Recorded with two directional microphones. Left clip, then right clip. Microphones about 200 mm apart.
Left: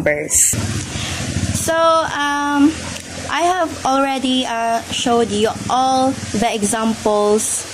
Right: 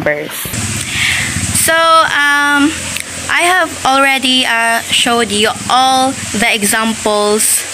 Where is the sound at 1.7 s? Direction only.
Centre (ahead or behind).